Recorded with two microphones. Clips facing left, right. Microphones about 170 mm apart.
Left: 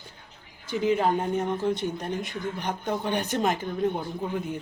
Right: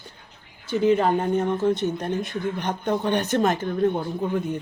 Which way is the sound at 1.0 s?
65° right (ahead or behind).